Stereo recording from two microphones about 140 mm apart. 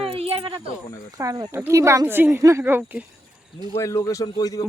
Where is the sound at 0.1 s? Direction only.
45° right (ahead or behind).